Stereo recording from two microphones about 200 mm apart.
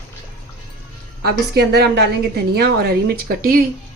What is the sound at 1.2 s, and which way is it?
A woman's voice, 55° right (ahead or behind).